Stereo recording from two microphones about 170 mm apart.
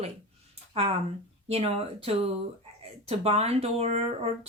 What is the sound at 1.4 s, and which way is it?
Speech, 35° right (ahead or behind).